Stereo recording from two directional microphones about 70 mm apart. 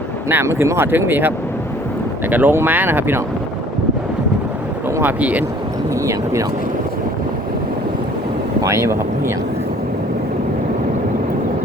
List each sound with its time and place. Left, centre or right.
0.3 s speech: right
2.3 s speech: right
5.0 s speech: right
8.6 s speech: right